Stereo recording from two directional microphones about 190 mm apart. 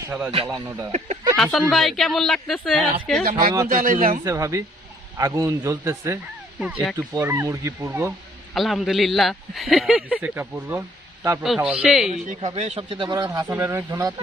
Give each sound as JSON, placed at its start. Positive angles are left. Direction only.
{"t": 0.3, "sound": "speech", "side_deg": -25}
{"t": 0.9, "sound": "speech", "side_deg": -35}
{"t": 1.4, "sound": "speech", "side_deg": 0}
{"t": 3.7, "sound": "speech", "side_deg": -45}
{"t": 4.2, "sound": "speech", "side_deg": -15}
{"t": 8.5, "sound": "speech", "side_deg": 0}
{"t": 11.4, "sound": "speech", "side_deg": 0}
{"t": 12.1, "sound": "speech", "side_deg": -40}